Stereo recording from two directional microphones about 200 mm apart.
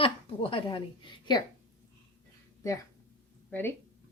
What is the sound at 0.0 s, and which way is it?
A woman's voice, 25° left (ahead or behind).